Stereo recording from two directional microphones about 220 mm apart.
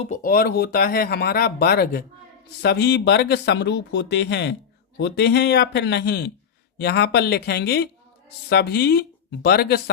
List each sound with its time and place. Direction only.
0.0 s speech: 35° left (ahead or behind)